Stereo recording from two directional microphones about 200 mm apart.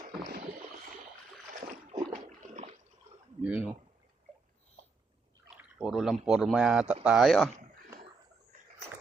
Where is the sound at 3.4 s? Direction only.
5° right (ahead or behind).